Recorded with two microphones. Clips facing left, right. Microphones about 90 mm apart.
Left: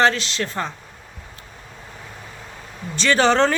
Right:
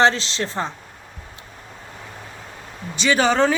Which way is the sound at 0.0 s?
25° right (ahead or behind).